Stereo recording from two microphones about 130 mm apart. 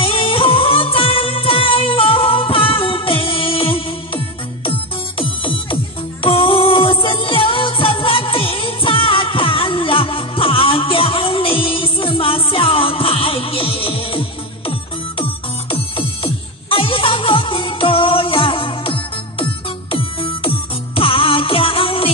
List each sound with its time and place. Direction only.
0.0 s music: 45° left (ahead or behind)
5.2 s music: 45° left (ahead or behind)
15.7 s music: 45° left (ahead or behind)